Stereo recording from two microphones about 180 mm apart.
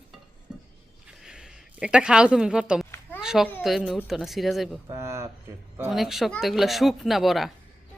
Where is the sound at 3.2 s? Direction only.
5° right (ahead or behind).